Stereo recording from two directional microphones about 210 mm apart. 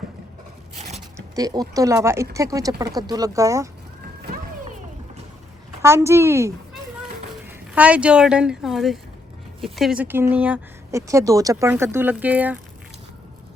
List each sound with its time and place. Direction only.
1.4 s speech: 15° right (ahead or behind)
5.8 s speech: 15° right (ahead or behind)